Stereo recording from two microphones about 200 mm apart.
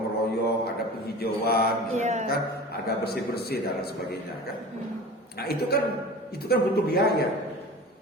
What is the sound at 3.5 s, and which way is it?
Speech, 50° left (ahead or behind).